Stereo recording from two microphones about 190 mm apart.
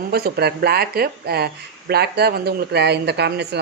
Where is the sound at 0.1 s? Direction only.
55° right (ahead or behind).